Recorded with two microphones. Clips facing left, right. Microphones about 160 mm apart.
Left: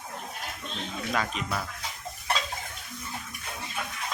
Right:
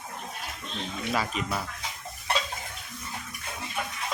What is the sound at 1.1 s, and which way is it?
Speech, 5° right (ahead or behind).